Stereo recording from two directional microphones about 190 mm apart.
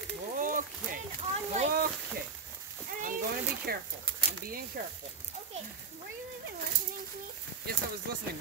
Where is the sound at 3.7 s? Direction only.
55° right (ahead or behind).